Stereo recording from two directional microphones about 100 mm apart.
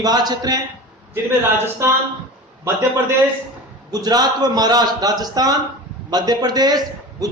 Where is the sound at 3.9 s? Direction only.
40° right (ahead or behind).